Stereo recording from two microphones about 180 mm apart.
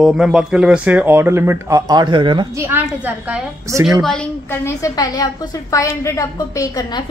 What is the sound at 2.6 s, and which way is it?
Speech, 10° right (ahead or behind).